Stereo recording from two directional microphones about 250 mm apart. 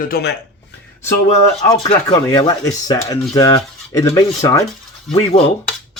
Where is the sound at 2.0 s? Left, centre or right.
Centre.